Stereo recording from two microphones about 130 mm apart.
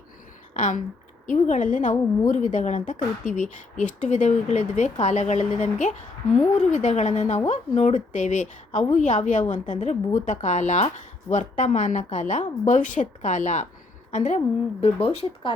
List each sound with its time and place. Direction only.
0.5 s a sound: 70° left (ahead or behind)
1.3 s a woman's voice: 75° left (ahead or behind); by 14.9 s 60° left (ahead or behind)
15.0 s speech: 45° left (ahead or behind)